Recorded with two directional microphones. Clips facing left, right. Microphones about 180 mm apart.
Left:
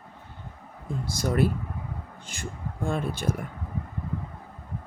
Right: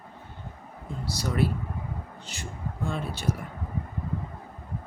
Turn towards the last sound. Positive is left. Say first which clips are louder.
# left 2 dB
turn(degrees=50)  # may be behind; listen again after turning